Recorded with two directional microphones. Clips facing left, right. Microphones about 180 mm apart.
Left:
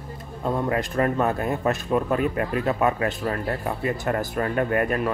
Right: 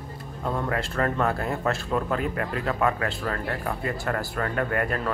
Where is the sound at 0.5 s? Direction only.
20° left (ahead or behind).